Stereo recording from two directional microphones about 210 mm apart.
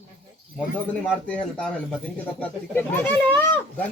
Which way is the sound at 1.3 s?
5° left (ahead or behind).